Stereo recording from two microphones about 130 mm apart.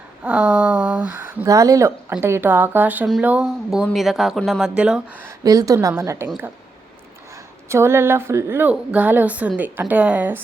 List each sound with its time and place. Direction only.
0.3 s speech: 10° right (ahead or behind)
1.5 s speech: 25° right (ahead or behind); by 5.2 s 10° right (ahead or behind)
5.4 s speech: 30° right (ahead or behind)
7.7 s speech: 20° right (ahead or behind)